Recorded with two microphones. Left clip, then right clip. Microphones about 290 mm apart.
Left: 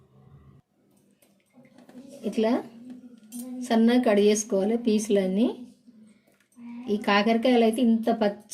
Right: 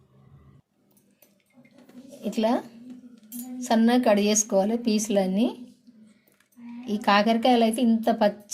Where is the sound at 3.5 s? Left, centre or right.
Centre.